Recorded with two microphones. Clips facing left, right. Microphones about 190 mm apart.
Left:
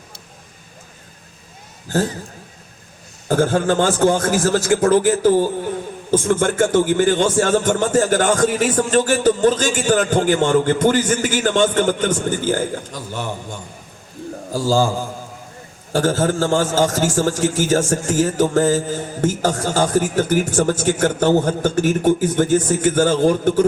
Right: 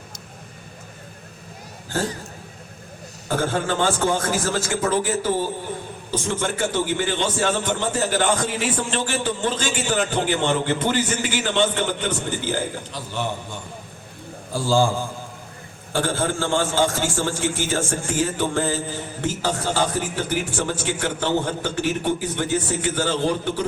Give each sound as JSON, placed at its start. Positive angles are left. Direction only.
{"t": 3.2, "sound": "a man's voice", "side_deg": 45}
{"t": 14.5, "sound": "a man's voice", "side_deg": 40}